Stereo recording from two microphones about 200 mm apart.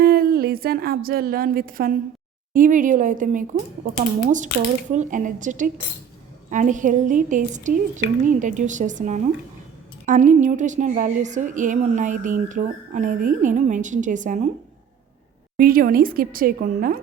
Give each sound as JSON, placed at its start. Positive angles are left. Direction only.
{"t": 0.0, "sound": "a woman's voice", "side_deg": -45}
{"t": 15.5, "sound": "a woman's voice", "side_deg": -45}